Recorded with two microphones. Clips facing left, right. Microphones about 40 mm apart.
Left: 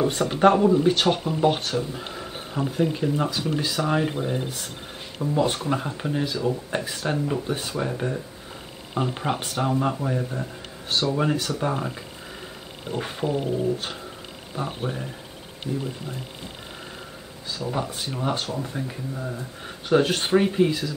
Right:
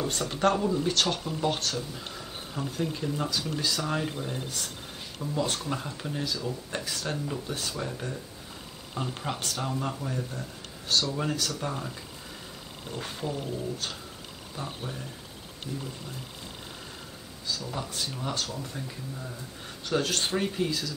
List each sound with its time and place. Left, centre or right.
0.0 s speech: left
17.5 s speech: left